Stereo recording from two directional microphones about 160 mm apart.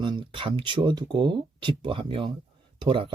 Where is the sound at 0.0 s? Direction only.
30° right (ahead or behind).